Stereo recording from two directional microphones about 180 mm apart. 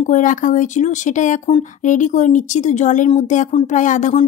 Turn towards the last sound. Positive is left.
turn(degrees=45)  # may be behind; listen again after turning